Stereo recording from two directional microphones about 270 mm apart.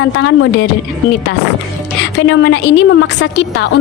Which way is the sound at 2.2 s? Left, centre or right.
Left.